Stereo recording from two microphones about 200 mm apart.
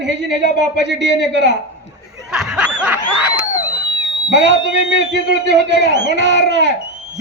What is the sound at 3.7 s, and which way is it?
A man's voice, 65° right (ahead or behind).